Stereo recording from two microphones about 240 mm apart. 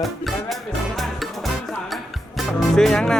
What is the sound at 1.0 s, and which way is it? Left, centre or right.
Music, centre.